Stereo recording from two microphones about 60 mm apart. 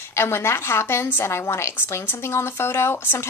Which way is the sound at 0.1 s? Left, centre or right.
Left.